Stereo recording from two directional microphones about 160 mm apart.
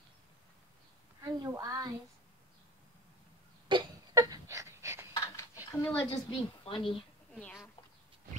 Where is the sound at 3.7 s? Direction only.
25° right (ahead or behind).